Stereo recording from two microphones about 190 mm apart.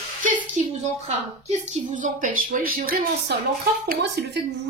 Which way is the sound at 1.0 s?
35° right (ahead or behind).